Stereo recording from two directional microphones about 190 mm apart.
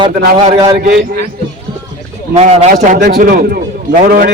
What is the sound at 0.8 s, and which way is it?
Speech, 55° right (ahead or behind).